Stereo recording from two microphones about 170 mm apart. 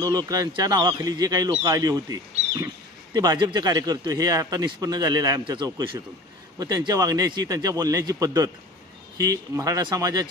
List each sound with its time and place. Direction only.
0.0 s a man's voice: 20° right (ahead or behind)